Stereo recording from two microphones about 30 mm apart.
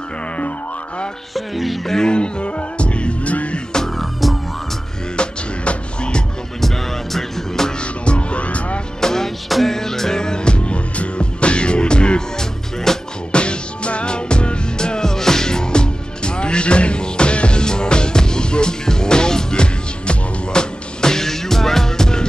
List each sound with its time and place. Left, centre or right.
1.3 s music: centre
2.0 s music: left
3.9 s music: centre
5.1 s music: left
6.6 s music: centre
7.8 s music: left
9.0 s music: centre
9.5 s music: centre; by 12.2 s left
12.4 s music: centre
13.3 s music: left; by 22.2 s centre